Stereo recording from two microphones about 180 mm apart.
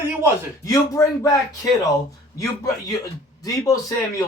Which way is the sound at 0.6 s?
20° left (ahead or behind).